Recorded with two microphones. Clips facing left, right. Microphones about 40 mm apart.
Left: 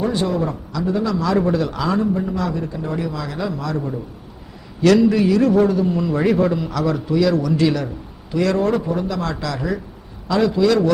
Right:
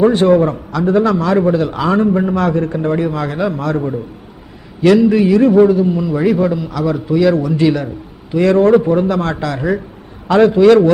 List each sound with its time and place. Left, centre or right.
0.0 s a man's voice: right
1.4 s a man's voice: right
4.8 s a man's voice: centre
7.1 s a man's voice: right